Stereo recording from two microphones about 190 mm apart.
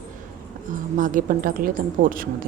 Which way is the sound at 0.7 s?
45° right (ahead or behind).